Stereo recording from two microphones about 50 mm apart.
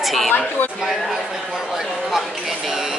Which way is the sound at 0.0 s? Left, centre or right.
Centre.